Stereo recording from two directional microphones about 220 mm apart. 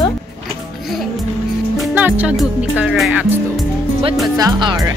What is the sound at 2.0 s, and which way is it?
Speech, 5° right (ahead or behind).